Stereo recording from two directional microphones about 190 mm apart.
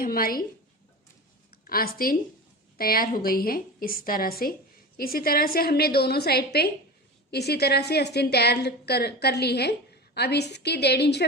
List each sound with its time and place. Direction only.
0.0 s a woman's voice: 50° left (ahead or behind)
1.6 s a woman's voice: 50° left (ahead or behind)